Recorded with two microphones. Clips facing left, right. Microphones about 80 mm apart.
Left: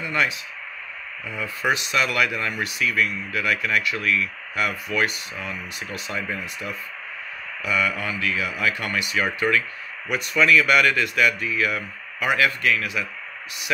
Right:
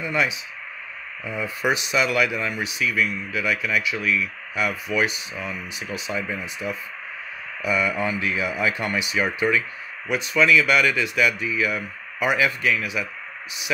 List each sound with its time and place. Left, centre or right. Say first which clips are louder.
0.0 s speech: even; centre
7.6 s speech: right 2 dB; right
10.1 s speech: even; centre